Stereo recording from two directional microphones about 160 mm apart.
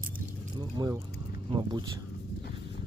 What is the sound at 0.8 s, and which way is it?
Speech, 25° right (ahead or behind).